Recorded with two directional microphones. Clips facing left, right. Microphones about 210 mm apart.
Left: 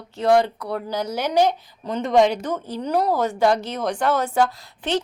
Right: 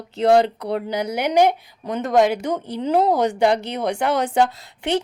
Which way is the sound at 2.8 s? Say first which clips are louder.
Right 3 dB; 20° right (ahead or behind).